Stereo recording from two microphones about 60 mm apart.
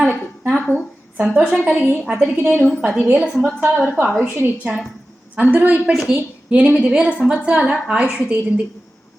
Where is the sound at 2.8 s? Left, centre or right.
Centre.